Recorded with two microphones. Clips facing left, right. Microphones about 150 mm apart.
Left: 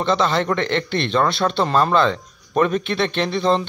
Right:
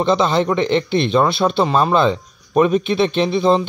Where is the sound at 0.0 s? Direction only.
15° right (ahead or behind).